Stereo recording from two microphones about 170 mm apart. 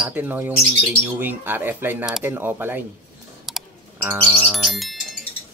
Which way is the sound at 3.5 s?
Centre (ahead or behind).